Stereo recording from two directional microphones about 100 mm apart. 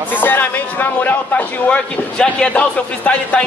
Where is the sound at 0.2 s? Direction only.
20° left (ahead or behind).